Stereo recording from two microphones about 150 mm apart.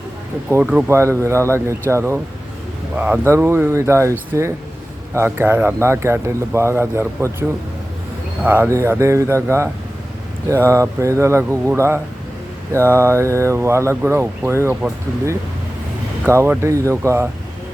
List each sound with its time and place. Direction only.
0.6 s speech: 10° right (ahead or behind)
8.4 s speech: 15° right (ahead or behind)
12.9 s speech: 15° right (ahead or behind)
16.2 s speech: 15° right (ahead or behind)